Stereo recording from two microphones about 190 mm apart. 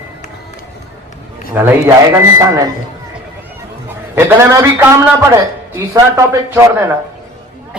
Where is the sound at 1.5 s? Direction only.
10° right (ahead or behind).